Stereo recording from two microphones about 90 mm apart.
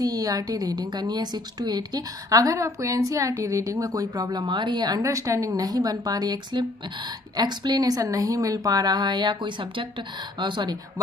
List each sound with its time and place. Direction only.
0.0 s a woman's voice: 45° right (ahead or behind); by 10.8 s 60° right (ahead or behind)